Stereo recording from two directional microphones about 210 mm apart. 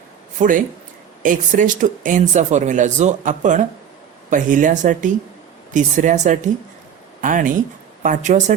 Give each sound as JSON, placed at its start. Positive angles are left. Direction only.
{"t": 0.3, "sound": "speech", "side_deg": -40}